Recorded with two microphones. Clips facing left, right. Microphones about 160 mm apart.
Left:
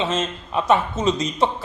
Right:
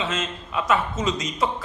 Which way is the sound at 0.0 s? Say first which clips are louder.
Left 4 dB; 35° left (ahead or behind).